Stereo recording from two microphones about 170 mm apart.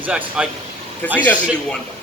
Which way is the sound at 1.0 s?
10° left (ahead or behind).